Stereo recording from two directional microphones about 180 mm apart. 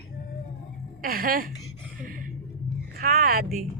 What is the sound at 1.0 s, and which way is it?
Speech, 55° right (ahead or behind).